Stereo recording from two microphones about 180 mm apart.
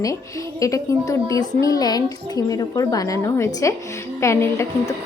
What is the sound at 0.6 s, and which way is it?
Speech, 20° left (ahead or behind).